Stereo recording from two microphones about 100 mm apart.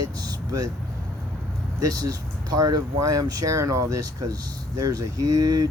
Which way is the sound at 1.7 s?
35° right (ahead or behind).